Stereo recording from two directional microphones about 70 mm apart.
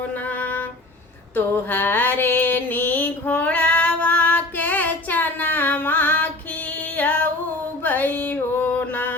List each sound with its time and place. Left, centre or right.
0.0 s music: left
1.6 s mantra: left
7.8 s music: left